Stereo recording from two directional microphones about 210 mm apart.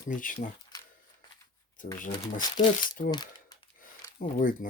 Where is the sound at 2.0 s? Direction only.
25° left (ahead or behind).